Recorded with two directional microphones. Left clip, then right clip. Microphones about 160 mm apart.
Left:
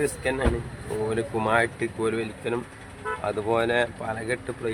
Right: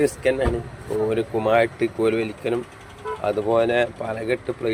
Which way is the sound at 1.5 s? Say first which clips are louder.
Right 5 dB; 15° right (ahead or behind).